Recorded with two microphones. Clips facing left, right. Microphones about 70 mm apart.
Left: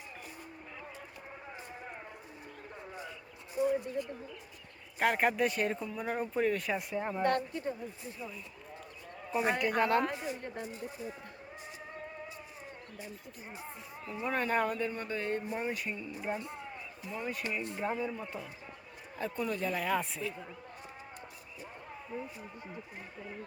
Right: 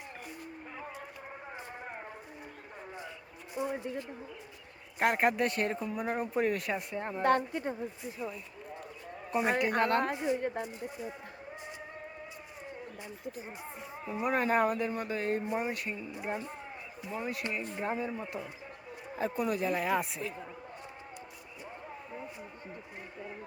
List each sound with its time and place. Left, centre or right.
1.5 s a sound: right
3.8 s speech: right
4.9 s speech: centre
5.8 s speech: centre
7.2 s speech: right
7.5 s speech: right
9.3 s speech: centre
10.2 s speech: right
14.0 s speech: centre
15.7 s speech: centre
19.1 s speech: right
19.5 s speech: centre
22.1 s a sound: centre